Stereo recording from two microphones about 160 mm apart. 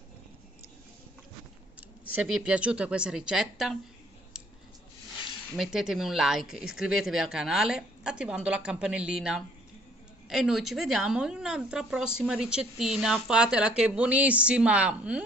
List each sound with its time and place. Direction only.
2.3 s speech: 5° right (ahead or behind)
5.6 s speech: 5° right (ahead or behind)